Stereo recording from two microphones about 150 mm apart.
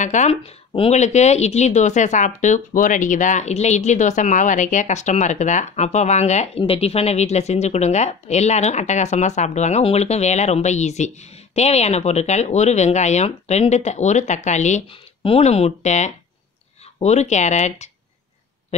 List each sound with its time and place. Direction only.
0.0 s speech: 55° left (ahead or behind)
14.9 s speech: 40° left (ahead or behind)